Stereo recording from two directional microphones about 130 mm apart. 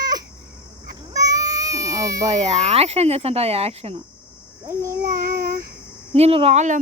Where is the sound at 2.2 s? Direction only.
60° right (ahead or behind).